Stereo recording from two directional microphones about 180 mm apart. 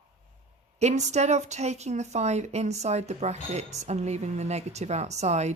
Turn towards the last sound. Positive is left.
turn(degrees=-40)  # may be behind; listen again after turning